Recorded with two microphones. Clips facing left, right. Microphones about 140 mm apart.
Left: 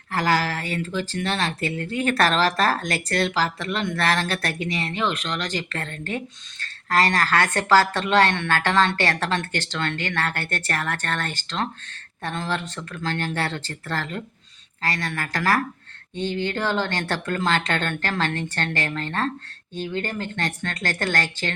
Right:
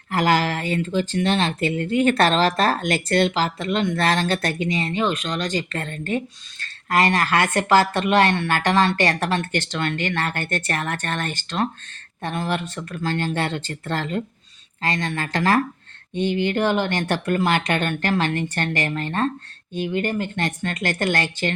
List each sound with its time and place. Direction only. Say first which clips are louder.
0.1 s speech: right 3 dB; 20° right (ahead or behind)